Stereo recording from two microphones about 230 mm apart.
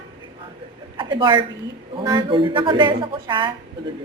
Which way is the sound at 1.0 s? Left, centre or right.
Centre.